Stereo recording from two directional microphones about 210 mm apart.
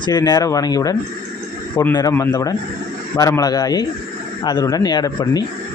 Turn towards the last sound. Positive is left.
turn(degrees=20)  # may be behind; listen again after turning